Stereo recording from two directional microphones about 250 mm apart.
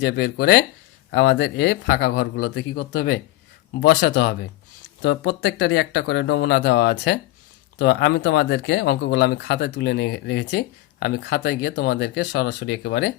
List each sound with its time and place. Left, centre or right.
0.0 s speech: left